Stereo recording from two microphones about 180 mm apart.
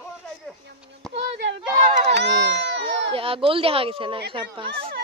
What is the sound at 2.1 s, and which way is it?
Speech, 75° right (ahead or behind).